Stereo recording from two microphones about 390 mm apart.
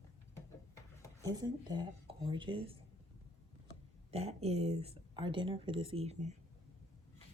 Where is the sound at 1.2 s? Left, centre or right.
Centre.